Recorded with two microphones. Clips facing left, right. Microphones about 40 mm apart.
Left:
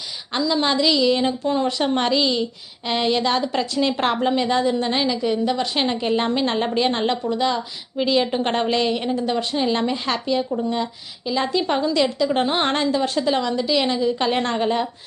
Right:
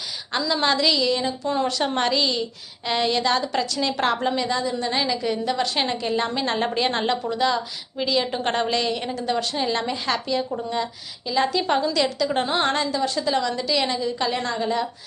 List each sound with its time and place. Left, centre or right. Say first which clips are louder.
0.3 s a woman's voice: left 2 dB; centre; by 4.4 s left
4.4 s a woman's voice: left 5 dB; left
5.0 s a woman's voice: left 3 dB; centre
6.0 s a woman's voice: left 3 dB; left
6.4 s a woman's voice: left 2 dB; centre
14.2 s a woman's voice: left 4 dB; left